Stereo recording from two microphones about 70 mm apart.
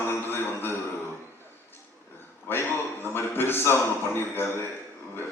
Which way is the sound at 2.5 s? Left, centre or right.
Left.